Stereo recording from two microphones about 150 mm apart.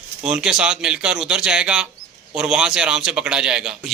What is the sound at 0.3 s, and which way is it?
Speech, 5° right (ahead or behind).